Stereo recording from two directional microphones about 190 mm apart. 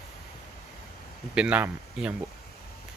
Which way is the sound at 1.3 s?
5° right (ahead or behind).